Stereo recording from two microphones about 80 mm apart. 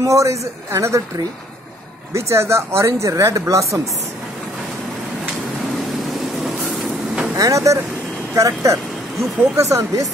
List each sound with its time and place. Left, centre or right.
0.0 s speech: right
2.1 s speech: right
7.3 s speech: right